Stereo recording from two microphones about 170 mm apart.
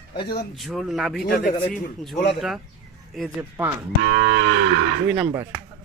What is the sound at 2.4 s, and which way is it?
Speech, centre (ahead or behind).